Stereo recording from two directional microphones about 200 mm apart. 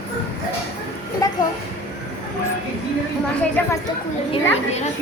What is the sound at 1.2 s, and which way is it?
Speech, 15° left (ahead or behind).